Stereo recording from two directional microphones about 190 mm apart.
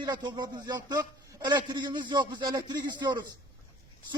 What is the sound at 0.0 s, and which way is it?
Speech, 25° right (ahead or behind).